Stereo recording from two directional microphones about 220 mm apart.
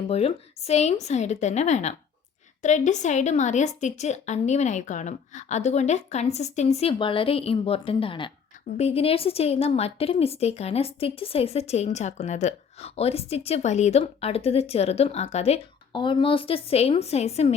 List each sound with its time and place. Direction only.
0.1 s a woman's voice: 30° left (ahead or behind)